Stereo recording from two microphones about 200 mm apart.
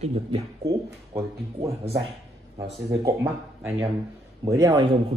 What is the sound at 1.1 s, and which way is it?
Speech, 10° right (ahead or behind).